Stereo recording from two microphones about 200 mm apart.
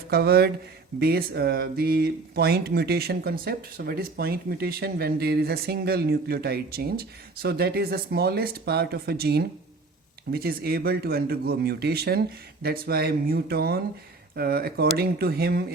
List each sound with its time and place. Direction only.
0.1 s speech: 50° right (ahead or behind)